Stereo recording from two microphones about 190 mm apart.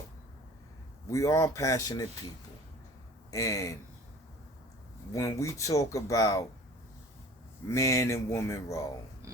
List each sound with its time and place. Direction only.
1.1 s speech: 15° left (ahead or behind)
3.3 s speech: 20° left (ahead or behind)
5.1 s speech: 15° left (ahead or behind)
7.7 s speech: 15° left (ahead or behind)